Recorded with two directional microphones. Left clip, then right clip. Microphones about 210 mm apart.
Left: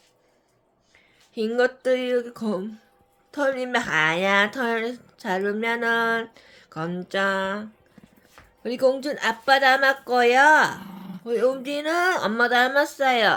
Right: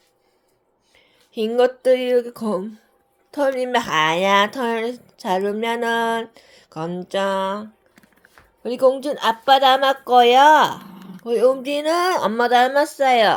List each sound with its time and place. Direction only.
0.9 s speech: 20° right (ahead or behind)